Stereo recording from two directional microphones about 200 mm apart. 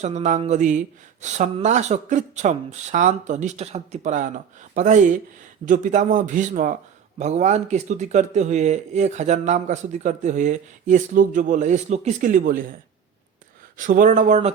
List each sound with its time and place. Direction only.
0.0 s speech: 35° right (ahead or behind)
13.7 s speech: 40° right (ahead or behind)